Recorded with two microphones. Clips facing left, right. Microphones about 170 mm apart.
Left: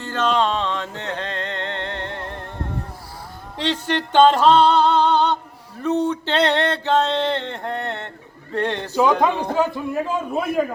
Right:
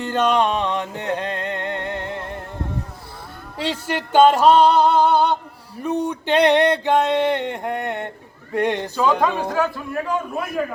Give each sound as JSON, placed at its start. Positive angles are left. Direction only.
{"t": 0.0, "sound": "music", "side_deg": -15}
{"t": 3.6, "sound": "a sound", "side_deg": -10}
{"t": 9.4, "sound": "a man's voice", "side_deg": 15}